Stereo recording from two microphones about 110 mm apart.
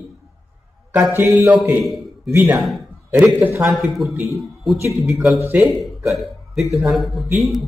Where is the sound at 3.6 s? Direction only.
Centre (ahead or behind).